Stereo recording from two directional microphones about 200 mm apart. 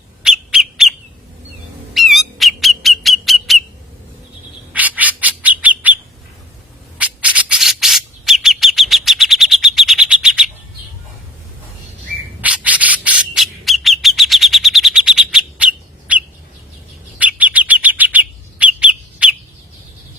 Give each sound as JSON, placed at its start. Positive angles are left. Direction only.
{"t": 0.2, "sound": "bird", "side_deg": -5}
{"t": 4.7, "sound": "bird", "side_deg": -10}
{"t": 7.0, "sound": "bird", "side_deg": -5}
{"t": 12.4, "sound": "bird", "side_deg": -5}